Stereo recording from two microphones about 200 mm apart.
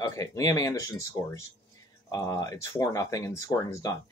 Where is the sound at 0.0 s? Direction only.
15° left (ahead or behind).